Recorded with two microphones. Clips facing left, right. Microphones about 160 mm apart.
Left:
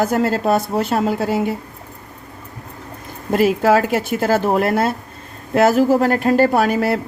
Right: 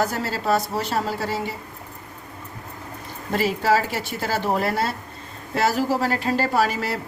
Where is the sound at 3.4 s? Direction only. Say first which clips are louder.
Left 6 dB; 55° left (ahead or behind).